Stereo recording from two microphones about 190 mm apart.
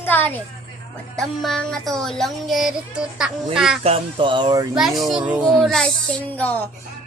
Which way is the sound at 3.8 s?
30° right (ahead or behind).